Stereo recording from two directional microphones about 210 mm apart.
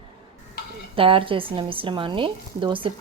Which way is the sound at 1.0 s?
25° right (ahead or behind).